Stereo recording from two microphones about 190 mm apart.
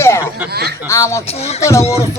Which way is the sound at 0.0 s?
15° left (ahead or behind).